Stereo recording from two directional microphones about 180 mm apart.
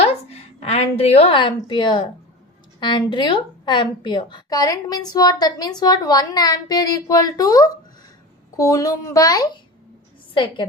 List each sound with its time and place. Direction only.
0.3 s a woman's voice: 35° left (ahead or behind)